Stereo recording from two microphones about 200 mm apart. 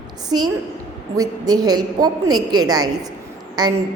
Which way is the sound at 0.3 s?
20° right (ahead or behind).